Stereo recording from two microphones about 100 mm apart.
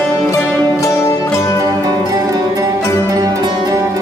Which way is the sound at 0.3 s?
30° left (ahead or behind).